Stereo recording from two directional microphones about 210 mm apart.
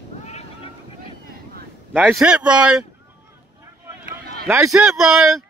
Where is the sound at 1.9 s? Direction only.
5° right (ahead or behind).